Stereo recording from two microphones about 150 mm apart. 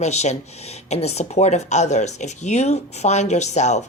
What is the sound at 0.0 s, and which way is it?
Speech, 50° left (ahead or behind).